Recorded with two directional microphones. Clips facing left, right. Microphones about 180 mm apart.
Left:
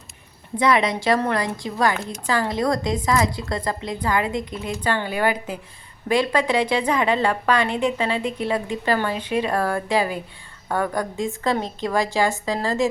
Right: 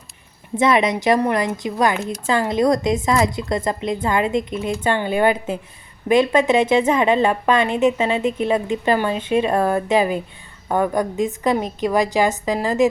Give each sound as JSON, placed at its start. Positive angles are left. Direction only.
{"t": 0.6, "sound": "a woman's voice", "side_deg": -20}